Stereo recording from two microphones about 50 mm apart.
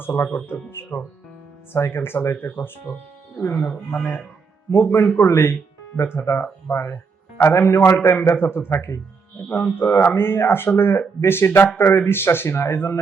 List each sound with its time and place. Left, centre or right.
0.0 s speech: left
3.9 s speech: left
4.7 s speech: left
6.0 s a man's voice: left